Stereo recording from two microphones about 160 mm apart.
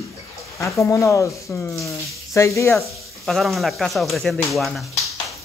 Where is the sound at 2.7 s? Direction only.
Centre (ahead or behind).